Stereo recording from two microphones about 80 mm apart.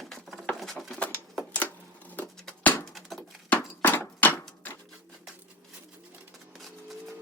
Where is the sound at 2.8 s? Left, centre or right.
Centre.